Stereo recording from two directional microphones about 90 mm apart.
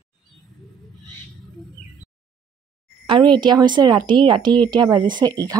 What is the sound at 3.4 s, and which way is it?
A woman's voice, 55° right (ahead or behind).